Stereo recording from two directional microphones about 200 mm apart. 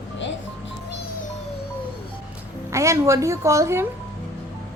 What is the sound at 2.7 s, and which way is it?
A woman's voice, 15° right (ahead or behind).